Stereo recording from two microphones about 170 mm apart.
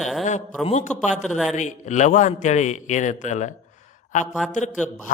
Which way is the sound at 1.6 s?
45° left (ahead or behind).